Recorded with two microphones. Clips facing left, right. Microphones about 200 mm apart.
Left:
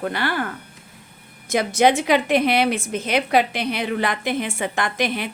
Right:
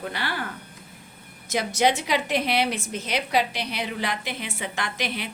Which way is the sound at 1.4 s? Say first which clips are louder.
Left 5 dB; 55° left (ahead or behind).